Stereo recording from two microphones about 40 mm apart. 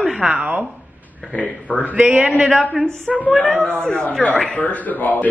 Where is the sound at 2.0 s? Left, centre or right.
Right.